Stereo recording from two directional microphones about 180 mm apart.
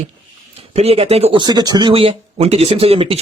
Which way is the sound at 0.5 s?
35° right (ahead or behind).